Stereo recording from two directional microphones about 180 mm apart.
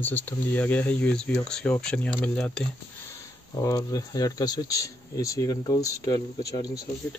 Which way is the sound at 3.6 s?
20° left (ahead or behind).